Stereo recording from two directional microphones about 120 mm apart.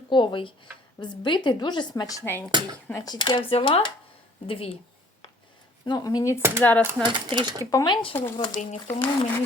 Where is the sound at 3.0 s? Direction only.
35° left (ahead or behind); by 4.8 s 55° left (ahead or behind).